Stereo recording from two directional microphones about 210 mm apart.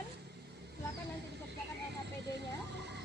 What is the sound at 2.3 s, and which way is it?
Speech, 55° right (ahead or behind).